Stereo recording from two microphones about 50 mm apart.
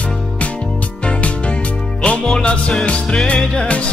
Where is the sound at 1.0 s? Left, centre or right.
Left.